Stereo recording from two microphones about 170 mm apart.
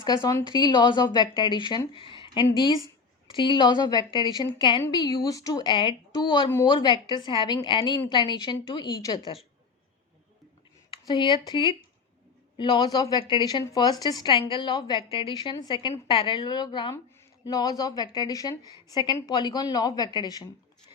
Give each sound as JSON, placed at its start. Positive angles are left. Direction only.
{"t": 0.0, "sound": "a woman's voice", "side_deg": 25}
{"t": 10.9, "sound": "a woman's voice", "side_deg": 25}